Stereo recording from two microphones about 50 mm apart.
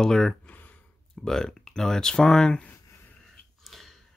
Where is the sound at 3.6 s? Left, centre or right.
Centre.